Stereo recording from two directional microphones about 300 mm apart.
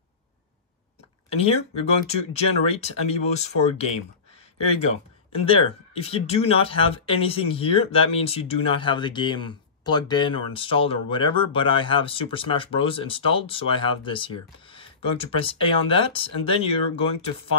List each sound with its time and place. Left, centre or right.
1.3 s speech: centre
5.3 s speech: centre